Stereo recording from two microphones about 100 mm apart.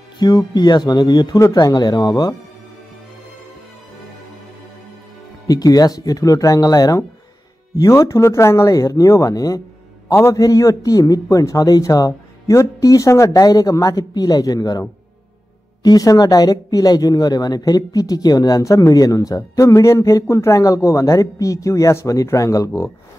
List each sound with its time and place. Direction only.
0.6 s speech: 45° left (ahead or behind)
5.5 s speech: 40° left (ahead or behind)